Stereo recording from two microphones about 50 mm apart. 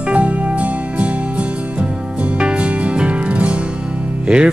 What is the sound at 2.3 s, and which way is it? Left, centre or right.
Music, right.